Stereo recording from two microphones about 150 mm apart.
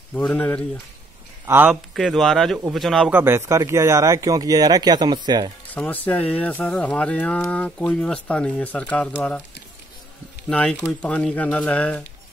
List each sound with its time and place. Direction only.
0.3 s speech: 10° left (ahead or behind)
1.4 s speech: 15° right (ahead or behind)
2.0 s speech: centre (ahead or behind)
3.1 s speech: 15° right (ahead or behind)
5.7 s speech: 10° left (ahead or behind)
10.5 s speech: 5° left (ahead or behind)